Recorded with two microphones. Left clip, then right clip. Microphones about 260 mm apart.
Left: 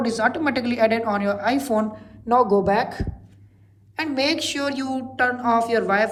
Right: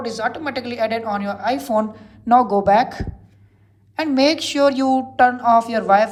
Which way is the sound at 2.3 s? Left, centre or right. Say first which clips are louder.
Right 4 dB; right.